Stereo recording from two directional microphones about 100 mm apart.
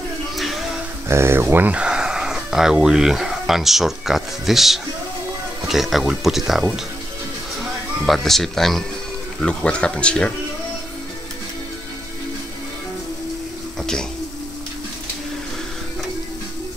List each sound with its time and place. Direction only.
0.4 s a sound: centre (ahead or behind)
1.0 s speech: 25° right (ahead or behind); by 6.6 s centre (ahead or behind)
8.1 s speech: centre (ahead or behind)
13.7 s bathtub: 5° left (ahead or behind)